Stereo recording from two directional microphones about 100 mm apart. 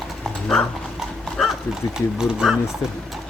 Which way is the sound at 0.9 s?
Centre (ahead or behind).